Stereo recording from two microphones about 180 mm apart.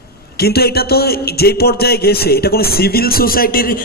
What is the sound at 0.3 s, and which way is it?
A man's voice, 60° left (ahead or behind).